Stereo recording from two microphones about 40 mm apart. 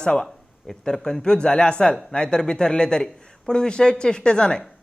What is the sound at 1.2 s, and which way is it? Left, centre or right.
Speech, centre.